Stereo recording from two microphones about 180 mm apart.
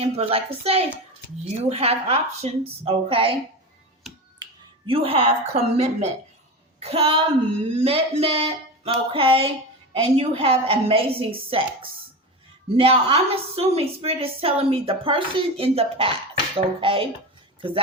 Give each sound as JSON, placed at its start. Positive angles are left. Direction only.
{"t": 0.0, "sound": "a woman's voice", "side_deg": -35}
{"t": 4.9, "sound": "a woman's voice", "side_deg": -30}